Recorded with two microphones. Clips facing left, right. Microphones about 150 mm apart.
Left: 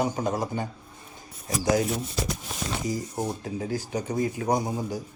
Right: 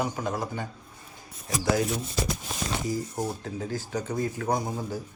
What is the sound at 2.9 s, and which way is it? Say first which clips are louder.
Speech: left 2 dB; 15° left (ahead or behind).